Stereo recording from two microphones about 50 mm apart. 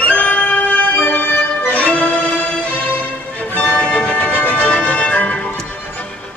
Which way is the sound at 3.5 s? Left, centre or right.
Left.